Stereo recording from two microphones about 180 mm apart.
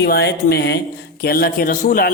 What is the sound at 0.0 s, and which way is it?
A man's voice, 65° left (ahead or behind).